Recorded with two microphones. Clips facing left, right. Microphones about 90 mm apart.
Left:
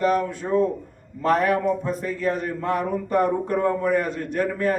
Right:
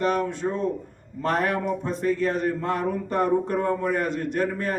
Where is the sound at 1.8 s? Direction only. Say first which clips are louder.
Right 1 dB; 35° right (ahead or behind).